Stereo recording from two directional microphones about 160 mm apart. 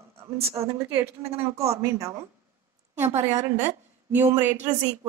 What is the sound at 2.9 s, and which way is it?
A woman's voice, 15° right (ahead or behind).